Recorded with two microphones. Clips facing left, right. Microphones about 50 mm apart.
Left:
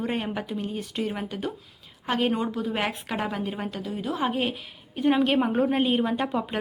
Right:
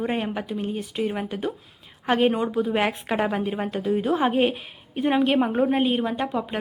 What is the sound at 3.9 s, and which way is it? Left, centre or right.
Speech, right.